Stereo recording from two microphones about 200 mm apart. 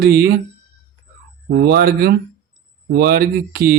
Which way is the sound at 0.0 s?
55° right (ahead or behind).